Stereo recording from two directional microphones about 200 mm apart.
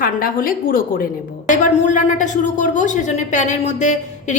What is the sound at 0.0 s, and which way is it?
A woman's voice, 45° left (ahead or behind).